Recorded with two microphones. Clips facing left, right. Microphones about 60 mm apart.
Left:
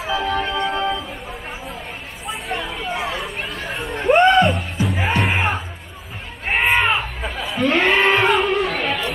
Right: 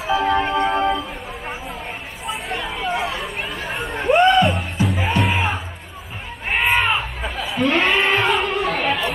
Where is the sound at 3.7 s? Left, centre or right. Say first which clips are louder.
Even; centre.